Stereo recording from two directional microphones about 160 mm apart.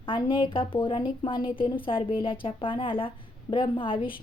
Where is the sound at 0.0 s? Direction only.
30° left (ahead or behind).